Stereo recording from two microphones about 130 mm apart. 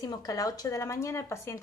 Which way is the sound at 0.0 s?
30° left (ahead or behind).